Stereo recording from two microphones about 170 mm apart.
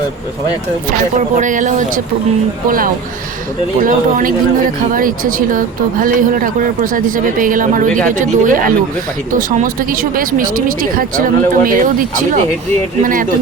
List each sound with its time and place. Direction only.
1.4 s speech: 50° right (ahead or behind)